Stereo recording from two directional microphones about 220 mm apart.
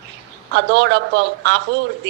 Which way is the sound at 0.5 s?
50° right (ahead or behind).